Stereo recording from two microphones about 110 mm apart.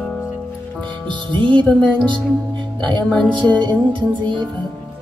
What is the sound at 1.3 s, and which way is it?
Music, 45° right (ahead or behind).